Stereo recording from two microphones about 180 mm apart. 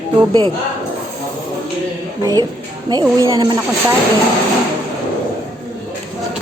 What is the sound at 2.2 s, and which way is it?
Speech, 20° right (ahead or behind).